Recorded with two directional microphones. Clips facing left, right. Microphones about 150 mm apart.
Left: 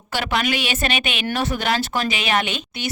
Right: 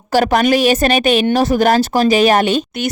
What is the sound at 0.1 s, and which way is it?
Speech, 45° right (ahead or behind).